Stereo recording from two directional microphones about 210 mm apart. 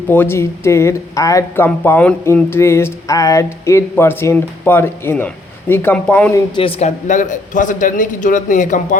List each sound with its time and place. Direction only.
0.1 s speech: 10° left (ahead or behind)
6.6 s a man's voice: 30° left (ahead or behind)